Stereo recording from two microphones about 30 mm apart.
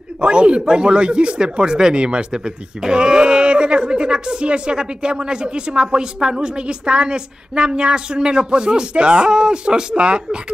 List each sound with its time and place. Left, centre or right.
0.2 s a woman's voice: right